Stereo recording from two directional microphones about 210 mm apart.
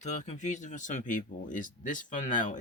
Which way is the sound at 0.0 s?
35° left (ahead or behind).